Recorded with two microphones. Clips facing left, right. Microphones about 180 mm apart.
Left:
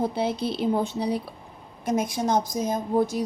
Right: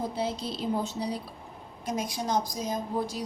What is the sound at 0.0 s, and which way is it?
Speech, 60° left (ahead or behind).